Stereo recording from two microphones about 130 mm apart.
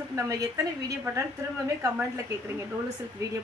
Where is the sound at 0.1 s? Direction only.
25° right (ahead or behind).